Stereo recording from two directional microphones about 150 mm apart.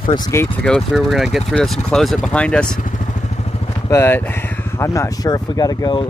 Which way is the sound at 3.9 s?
15° left (ahead or behind).